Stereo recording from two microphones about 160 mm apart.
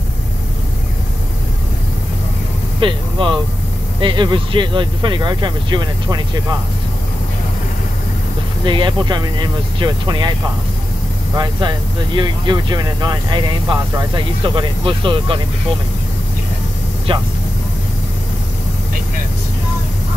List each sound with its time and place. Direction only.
2.8 s speech: 30° right (ahead or behind)
8.6 s speech: 30° right (ahead or behind)
11.3 s speech: 30° right (ahead or behind)
17.1 s speech: 35° right (ahead or behind)